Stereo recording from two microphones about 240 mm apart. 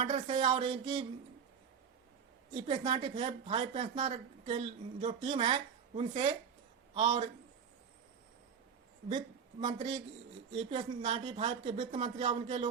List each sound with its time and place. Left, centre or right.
0.0 s a woman's voice: right
2.5 s a woman's voice: right
9.0 s a woman's voice: right